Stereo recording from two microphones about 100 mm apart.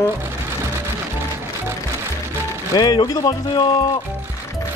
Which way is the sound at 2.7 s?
45° left (ahead or behind).